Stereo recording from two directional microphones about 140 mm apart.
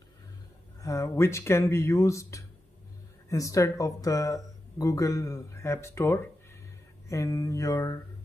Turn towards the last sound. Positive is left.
turn(degrees=25)  # may be behind; listen again after turning